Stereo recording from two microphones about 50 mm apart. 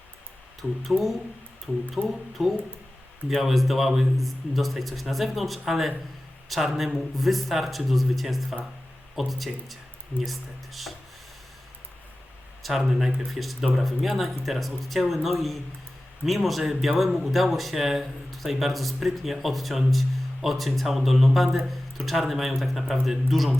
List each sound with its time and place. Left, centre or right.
0.9 s speech: centre
2.0 s speech: right
2.4 s speech: centre
12.6 s speech: centre